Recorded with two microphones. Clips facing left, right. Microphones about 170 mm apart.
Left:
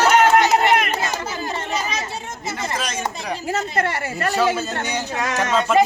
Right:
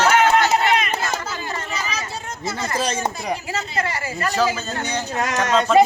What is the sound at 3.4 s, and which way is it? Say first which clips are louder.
Speech: left 3 dB; 50° left (ahead or behind).